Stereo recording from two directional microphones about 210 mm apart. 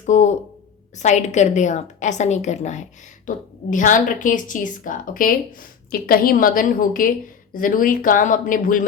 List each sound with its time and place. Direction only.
0.0 s a woman's voice: 35° left (ahead or behind)